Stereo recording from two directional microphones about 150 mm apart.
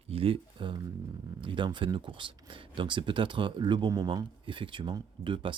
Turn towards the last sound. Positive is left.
turn(degrees=-35)  # may be behind; listen again after turning